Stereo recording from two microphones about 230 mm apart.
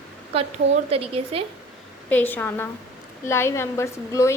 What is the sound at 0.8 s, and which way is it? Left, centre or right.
Speech, right.